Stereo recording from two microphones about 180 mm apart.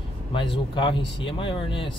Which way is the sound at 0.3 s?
25° left (ahead or behind).